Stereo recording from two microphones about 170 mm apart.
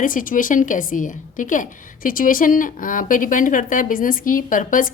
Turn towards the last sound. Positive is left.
turn(degrees=50)  # may be behind; listen again after turning